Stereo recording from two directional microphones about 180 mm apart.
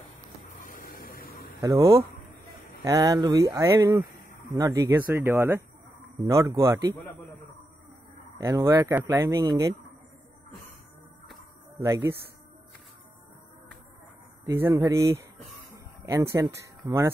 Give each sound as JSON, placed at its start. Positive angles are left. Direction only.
{"t": 0.5, "sound": "a sound", "side_deg": 50}
{"t": 1.6, "sound": "speech", "side_deg": -15}
{"t": 8.4, "sound": "speech", "side_deg": -15}
{"t": 11.8, "sound": "speech", "side_deg": -15}
{"t": 14.4, "sound": "speech", "side_deg": -15}
{"t": 16.4, "sound": "speech", "side_deg": -20}